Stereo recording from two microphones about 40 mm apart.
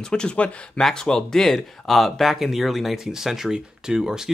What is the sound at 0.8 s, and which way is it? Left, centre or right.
Speech, centre.